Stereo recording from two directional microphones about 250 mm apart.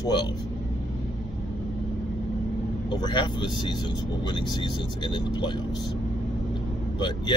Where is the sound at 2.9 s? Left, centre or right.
Centre.